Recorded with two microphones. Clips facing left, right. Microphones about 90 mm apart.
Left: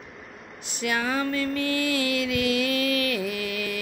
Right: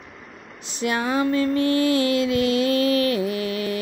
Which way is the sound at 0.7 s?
25° right (ahead or behind).